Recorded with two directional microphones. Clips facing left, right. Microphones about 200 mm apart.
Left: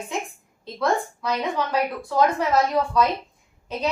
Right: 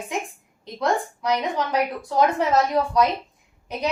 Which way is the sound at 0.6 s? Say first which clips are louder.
Even; 15° right (ahead or behind).